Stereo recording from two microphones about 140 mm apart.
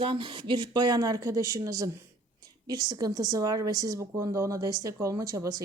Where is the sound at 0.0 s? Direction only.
40° right (ahead or behind).